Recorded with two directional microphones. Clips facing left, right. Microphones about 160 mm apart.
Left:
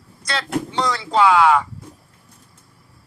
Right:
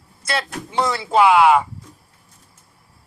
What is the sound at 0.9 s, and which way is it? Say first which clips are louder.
Speech: right 2 dB; 25° right (ahead or behind).